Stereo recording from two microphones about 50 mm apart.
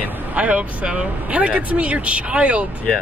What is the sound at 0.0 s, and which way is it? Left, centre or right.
Speech, right.